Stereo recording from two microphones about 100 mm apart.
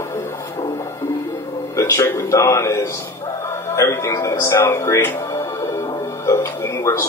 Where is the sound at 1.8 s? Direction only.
25° left (ahead or behind).